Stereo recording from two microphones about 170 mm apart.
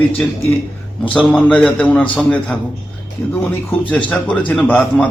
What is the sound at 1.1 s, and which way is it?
Speech, 5° left (ahead or behind).